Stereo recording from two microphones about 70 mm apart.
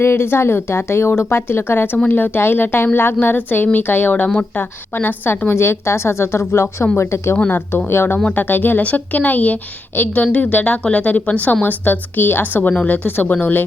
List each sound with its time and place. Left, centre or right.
0.0 s a woman's voice: left